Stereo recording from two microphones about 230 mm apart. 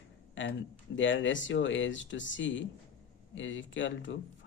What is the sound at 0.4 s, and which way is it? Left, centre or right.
Speech, left.